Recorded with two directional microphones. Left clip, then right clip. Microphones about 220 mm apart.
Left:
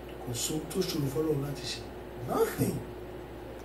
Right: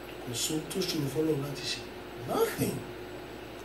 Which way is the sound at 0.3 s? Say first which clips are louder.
Right 1 dB; 5° left (ahead or behind).